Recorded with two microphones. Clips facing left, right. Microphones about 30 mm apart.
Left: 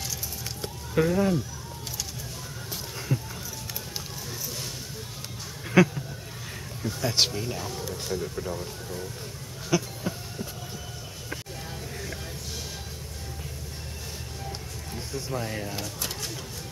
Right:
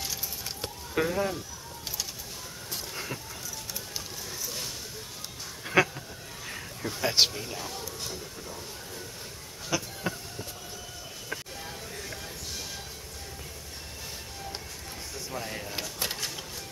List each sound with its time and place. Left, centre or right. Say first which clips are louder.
0.9 s speech: left 5 dB; centre
3.1 s music: left 7 dB; right
5.7 s a sound: left 3 dB; centre
6.8 s a sound: even; right
7.2 s speech: right 1 dB; centre
8.2 s speech: left 9 dB; left
9.7 s a sound: left 5 dB; centre
15.1 s speech: left 5 dB; centre
16.0 s music: right 1 dB; right